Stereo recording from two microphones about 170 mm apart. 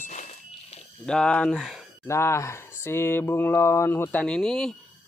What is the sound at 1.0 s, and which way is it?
Speech, 5° left (ahead or behind).